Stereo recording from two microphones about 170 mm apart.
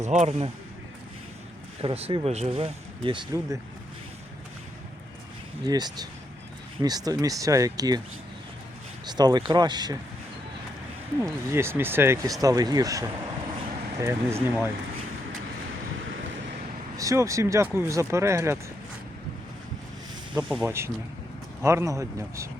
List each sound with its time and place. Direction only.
0.0 s speech: 45° right (ahead or behind)
1.8 s speech: 35° right (ahead or behind)
5.6 s speech: 25° right (ahead or behind)
9.0 s speech: 25° right (ahead or behind)
11.2 s speech: 15° right (ahead or behind)
17.0 s speech: 20° right (ahead or behind)
20.3 s speech: 5° right (ahead or behind)